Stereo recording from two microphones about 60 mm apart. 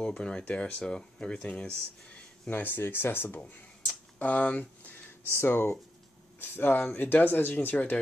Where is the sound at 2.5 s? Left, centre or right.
Left.